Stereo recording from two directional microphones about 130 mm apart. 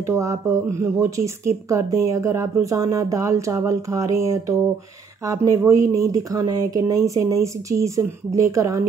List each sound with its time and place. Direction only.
0.1 s speech: 25° right (ahead or behind)